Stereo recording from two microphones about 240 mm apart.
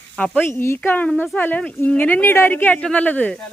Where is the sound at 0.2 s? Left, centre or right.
Centre.